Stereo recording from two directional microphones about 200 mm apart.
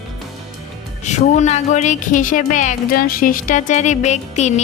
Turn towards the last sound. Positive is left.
turn(degrees=35)  # may be behind; listen again after turning